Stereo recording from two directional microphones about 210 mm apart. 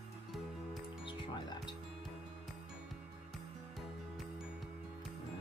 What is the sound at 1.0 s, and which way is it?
Music, 25° left (ahead or behind).